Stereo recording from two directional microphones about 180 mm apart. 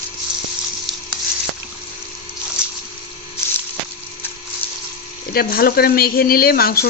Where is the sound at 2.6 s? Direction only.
5° right (ahead or behind).